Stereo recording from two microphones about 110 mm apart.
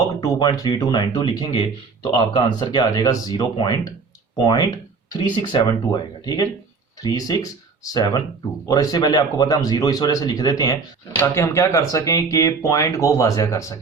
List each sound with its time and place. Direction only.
0.0 s speech: 30° left (ahead or behind)